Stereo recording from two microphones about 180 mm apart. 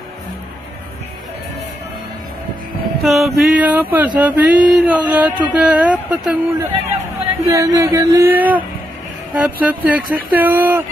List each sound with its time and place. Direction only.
3.0 s a sound: centre (ahead or behind)
4.2 s speech: 5° right (ahead or behind)
7.4 s speech: 20° right (ahead or behind)